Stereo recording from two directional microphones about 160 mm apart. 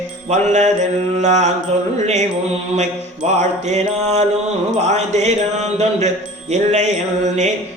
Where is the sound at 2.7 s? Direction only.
45° right (ahead or behind).